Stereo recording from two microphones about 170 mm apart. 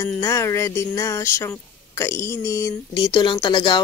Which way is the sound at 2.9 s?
25° left (ahead or behind).